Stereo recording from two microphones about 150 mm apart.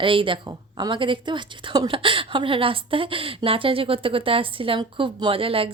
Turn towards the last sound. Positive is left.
turn(degrees=-40)  # may be behind; listen again after turning